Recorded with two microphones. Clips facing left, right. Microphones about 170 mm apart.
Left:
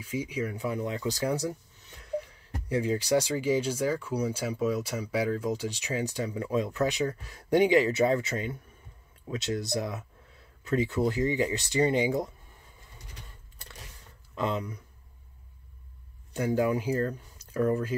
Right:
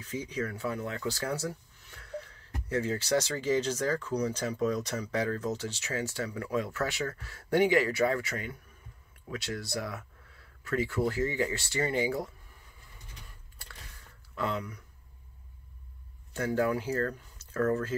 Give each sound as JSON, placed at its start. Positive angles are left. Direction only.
{"t": 0.0, "sound": "speech", "side_deg": 10}
{"t": 14.3, "sound": "speech", "side_deg": 20}
{"t": 16.3, "sound": "speech", "side_deg": 15}